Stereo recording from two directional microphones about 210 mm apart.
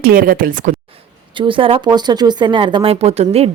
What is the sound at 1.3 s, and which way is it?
A woman's voice, 25° right (ahead or behind).